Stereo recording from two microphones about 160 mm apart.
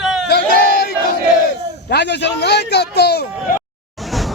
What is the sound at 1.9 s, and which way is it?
Speech, 90° left.